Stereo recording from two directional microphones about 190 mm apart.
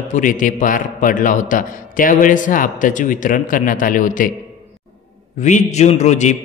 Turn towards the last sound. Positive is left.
turn(degrees=40)  # may be behind; listen again after turning